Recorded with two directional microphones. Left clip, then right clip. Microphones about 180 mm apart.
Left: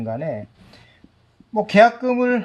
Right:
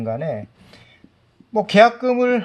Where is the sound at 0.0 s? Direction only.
40° right (ahead or behind).